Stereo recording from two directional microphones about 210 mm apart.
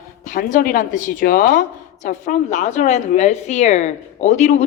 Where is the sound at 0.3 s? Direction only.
40° left (ahead or behind).